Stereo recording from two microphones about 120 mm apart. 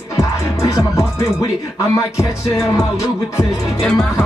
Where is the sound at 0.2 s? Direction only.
25° left (ahead or behind).